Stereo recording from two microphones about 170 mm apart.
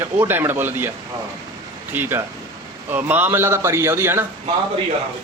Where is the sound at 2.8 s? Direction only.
10° right (ahead or behind).